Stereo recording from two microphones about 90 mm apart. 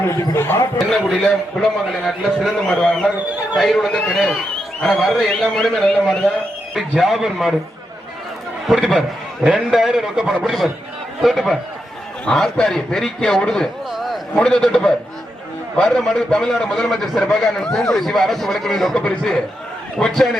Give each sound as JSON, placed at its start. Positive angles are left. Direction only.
{"t": 0.0, "sound": "speech", "side_deg": 30}
{"t": 0.9, "sound": "a man's voice", "side_deg": 5}
{"t": 8.6, "sound": "a man's voice", "side_deg": 0}
{"t": 12.2, "sound": "a man's voice", "side_deg": 10}
{"t": 13.9, "sound": "a sound", "side_deg": 0}
{"t": 14.3, "sound": "a man's voice", "side_deg": 10}